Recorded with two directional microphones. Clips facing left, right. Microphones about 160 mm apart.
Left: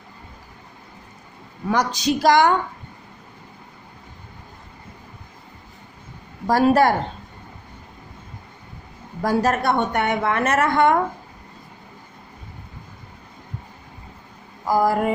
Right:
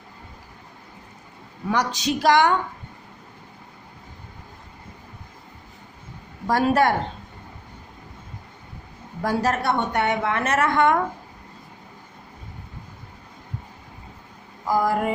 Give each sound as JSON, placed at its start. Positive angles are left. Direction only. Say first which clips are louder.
{"t": 1.7, "sound": "a woman's voice", "louder": "left 3 dB", "side_deg": 40}
{"t": 6.5, "sound": "a woman's voice", "louder": "left 3 dB", "side_deg": 35}
{"t": 9.2, "sound": "a woman's voice", "louder": "left 3 dB", "side_deg": 50}
{"t": 10.8, "sound": "a woman's voice", "louder": "left 2 dB", "side_deg": 35}
{"t": 14.7, "sound": "a woman's voice", "louder": "left 3 dB", "side_deg": 35}